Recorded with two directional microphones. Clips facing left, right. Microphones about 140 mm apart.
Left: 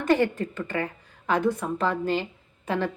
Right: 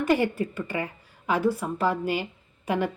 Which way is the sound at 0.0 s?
10° right (ahead or behind).